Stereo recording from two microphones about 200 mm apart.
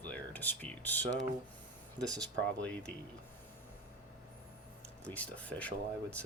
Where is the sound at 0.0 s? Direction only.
10° left (ahead or behind).